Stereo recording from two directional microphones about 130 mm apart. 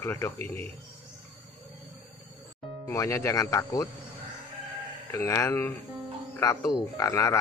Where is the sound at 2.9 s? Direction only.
25° left (ahead or behind).